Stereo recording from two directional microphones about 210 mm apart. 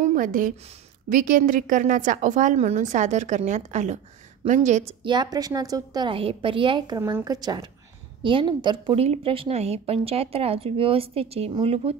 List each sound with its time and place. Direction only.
0.0 s a woman's voice: 40° right (ahead or behind)
5.0 s a woman's voice: 20° right (ahead or behind)
7.0 s a woman's voice: 10° right (ahead or behind); by 11.9 s 30° right (ahead or behind)